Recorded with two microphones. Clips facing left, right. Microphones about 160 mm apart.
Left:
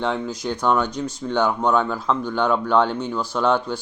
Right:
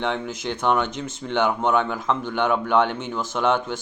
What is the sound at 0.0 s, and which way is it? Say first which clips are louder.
Speech: left 2 dB; 20° right (ahead or behind).